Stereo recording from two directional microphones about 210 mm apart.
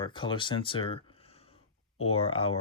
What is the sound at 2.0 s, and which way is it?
Speech, 30° left (ahead or behind).